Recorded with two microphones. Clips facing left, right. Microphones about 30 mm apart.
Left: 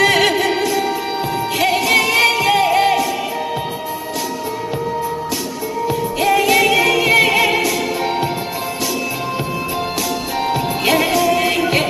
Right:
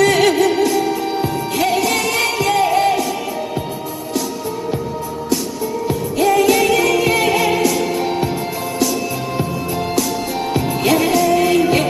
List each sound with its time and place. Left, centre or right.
0.0 s music: left
5.9 s music: centre
10.8 s music: left